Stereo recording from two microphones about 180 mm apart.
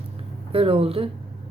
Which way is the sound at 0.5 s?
30° right (ahead or behind).